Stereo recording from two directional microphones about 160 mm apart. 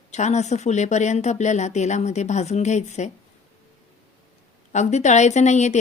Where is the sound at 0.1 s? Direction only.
45° left (ahead or behind).